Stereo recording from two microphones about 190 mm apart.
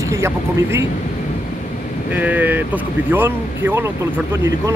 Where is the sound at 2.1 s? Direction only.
10° right (ahead or behind).